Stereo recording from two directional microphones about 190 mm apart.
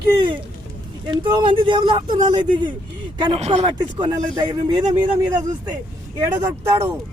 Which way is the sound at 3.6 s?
20° right (ahead or behind).